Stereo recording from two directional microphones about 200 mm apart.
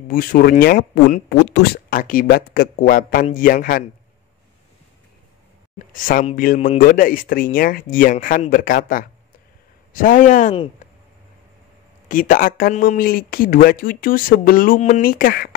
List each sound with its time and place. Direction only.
0.1 s speech: 45° left (ahead or behind)
6.0 s speech: 45° left (ahead or behind)
10.8 s a sound: 35° left (ahead or behind)
12.1 s speech: 40° left (ahead or behind)